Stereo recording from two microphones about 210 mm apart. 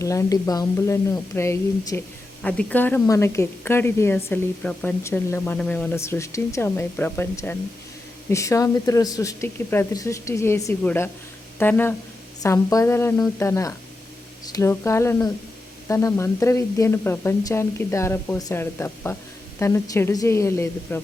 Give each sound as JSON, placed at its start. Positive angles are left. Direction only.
{"t": 0.0, "sound": "speech", "side_deg": 15}